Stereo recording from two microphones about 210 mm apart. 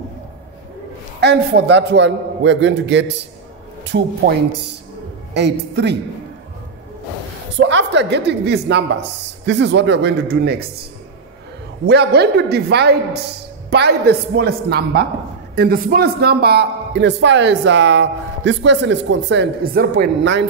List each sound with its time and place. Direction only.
1.2 s a man's voice: 55° right (ahead or behind)
5.3 s a man's voice: 55° right (ahead or behind)
7.5 s a man's voice: 60° right (ahead or behind)
11.8 s a man's voice: 50° right (ahead or behind)